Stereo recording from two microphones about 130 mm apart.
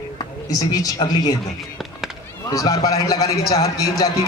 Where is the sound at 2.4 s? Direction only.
30° left (ahead or behind).